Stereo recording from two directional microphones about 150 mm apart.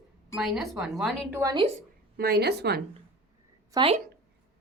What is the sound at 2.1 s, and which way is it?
Speech, 90° right.